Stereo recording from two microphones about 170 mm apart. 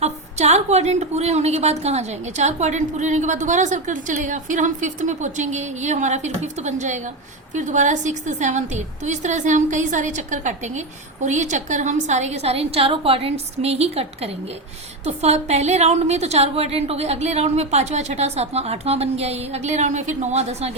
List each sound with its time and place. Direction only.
0.0 s a woman's voice: 40° right (ahead or behind)